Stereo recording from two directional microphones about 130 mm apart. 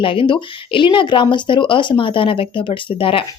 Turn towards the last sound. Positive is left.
turn(degrees=45)  # may be behind; listen again after turning